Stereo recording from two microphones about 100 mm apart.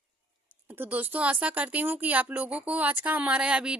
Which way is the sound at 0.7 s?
20° right (ahead or behind).